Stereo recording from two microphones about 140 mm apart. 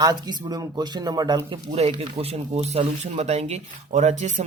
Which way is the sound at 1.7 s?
55° right (ahead or behind).